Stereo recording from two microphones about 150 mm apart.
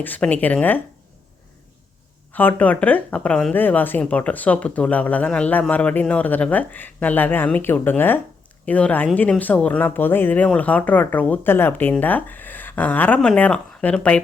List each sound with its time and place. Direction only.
0.0 s speech: 10° left (ahead or behind)
2.3 s speech: 10° left (ahead or behind)